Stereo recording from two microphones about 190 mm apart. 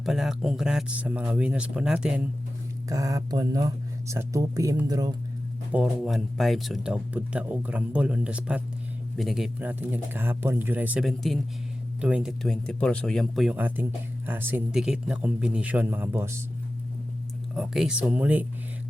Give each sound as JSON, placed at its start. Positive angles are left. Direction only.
{"t": 0.0, "sound": "speech", "side_deg": 0}
{"t": 2.9, "sound": "speech", "side_deg": -20}
{"t": 5.7, "sound": "speech", "side_deg": 0}
{"t": 17.5, "sound": "speech", "side_deg": 0}